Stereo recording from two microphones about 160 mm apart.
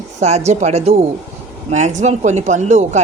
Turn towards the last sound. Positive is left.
turn(degrees=-45)  # may be behind; listen again after turning